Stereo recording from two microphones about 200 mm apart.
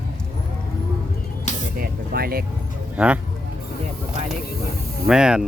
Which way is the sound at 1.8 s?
50° right (ahead or behind).